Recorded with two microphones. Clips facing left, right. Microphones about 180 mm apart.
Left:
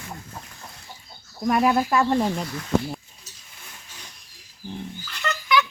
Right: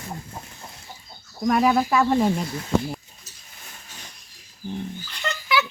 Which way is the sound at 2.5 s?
25° right (ahead or behind).